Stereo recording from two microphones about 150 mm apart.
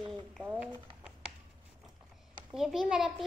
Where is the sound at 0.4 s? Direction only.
10° right (ahead or behind).